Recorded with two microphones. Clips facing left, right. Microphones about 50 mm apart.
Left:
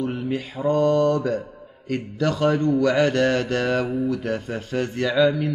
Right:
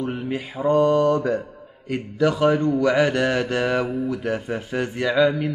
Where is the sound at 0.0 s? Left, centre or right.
Right.